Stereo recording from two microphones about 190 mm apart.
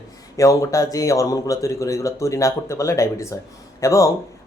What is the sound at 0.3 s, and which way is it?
Speech, 15° left (ahead or behind).